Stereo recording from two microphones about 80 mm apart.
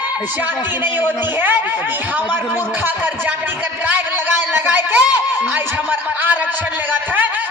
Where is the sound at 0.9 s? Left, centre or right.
Right.